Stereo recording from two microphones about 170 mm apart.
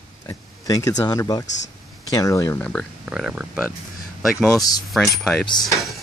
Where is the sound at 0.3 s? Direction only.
20° left (ahead or behind).